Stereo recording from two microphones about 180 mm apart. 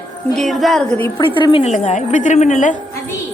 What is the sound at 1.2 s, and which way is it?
A woman's voice, 25° left (ahead or behind).